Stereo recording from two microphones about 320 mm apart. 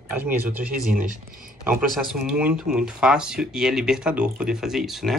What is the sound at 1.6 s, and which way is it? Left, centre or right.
Speech, centre.